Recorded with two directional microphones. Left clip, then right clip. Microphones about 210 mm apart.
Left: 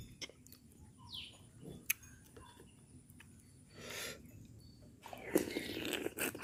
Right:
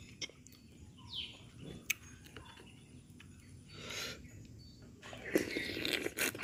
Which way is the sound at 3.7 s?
20° left (ahead or behind).